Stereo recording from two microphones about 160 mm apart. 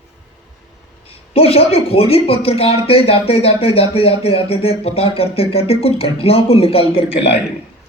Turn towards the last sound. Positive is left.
turn(degrees=35)  # may be behind; listen again after turning